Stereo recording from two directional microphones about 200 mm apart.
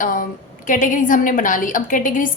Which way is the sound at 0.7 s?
40° left (ahead or behind).